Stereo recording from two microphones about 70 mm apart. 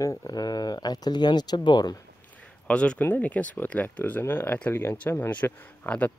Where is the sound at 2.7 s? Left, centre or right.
Centre.